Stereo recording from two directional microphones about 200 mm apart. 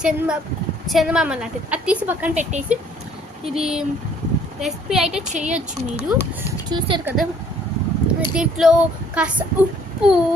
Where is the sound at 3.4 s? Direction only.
Centre (ahead or behind).